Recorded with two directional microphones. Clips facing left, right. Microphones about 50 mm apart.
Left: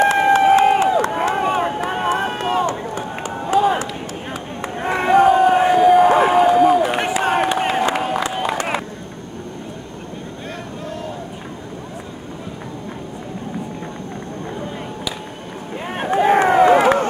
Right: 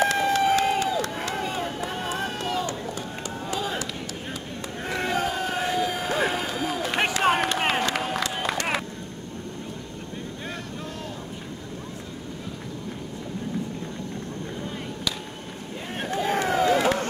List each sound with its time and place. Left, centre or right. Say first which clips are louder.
0.1 s run: left 9 dB; left; by 7.0 s centre
7.3 s a sound: left 6 dB; centre
15.8 s boat: left 9 dB; left
16.2 s run: left 11 dB; left